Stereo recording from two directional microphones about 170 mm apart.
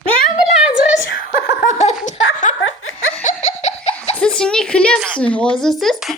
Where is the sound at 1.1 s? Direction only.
65° left (ahead or behind).